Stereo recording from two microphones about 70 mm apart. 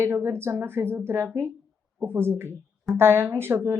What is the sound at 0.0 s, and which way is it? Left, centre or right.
Speech, right.